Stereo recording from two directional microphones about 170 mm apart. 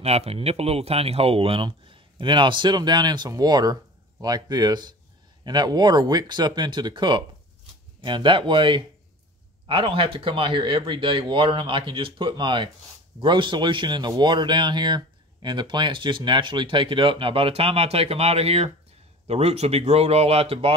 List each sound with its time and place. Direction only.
0.0 s a man's voice: 40° right (ahead or behind)